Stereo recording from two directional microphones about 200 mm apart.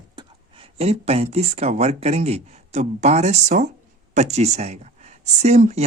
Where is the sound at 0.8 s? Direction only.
30° right (ahead or behind).